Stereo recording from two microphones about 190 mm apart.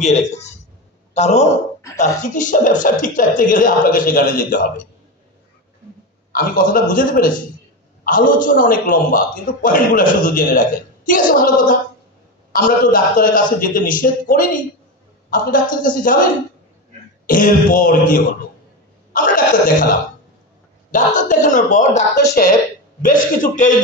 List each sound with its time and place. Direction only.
0.0 s a man's voice: 35° left (ahead or behind)
6.3 s a man's voice: 45° left (ahead or behind)
17.3 s a man's voice: 45° left (ahead or behind)
20.9 s a man's voice: 45° left (ahead or behind)
22.1 s a man's voice: 60° left (ahead or behind); by 23.7 s 45° left (ahead or behind)